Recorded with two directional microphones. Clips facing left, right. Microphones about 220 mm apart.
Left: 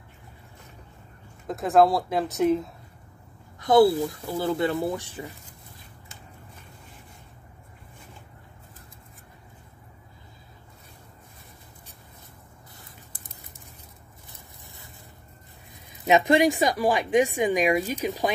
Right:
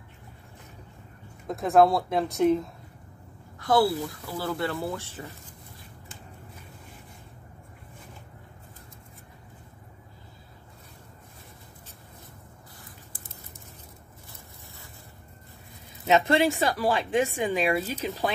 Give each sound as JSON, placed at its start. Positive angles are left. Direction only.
{"t": 1.5, "sound": "speech", "side_deg": 0}
{"t": 3.5, "sound": "speech", "side_deg": 20}
{"t": 15.9, "sound": "speech", "side_deg": 15}